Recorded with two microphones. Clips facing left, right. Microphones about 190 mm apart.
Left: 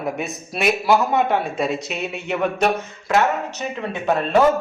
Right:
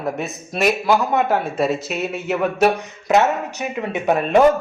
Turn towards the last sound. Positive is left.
turn(degrees=-15)  # may be behind; listen again after turning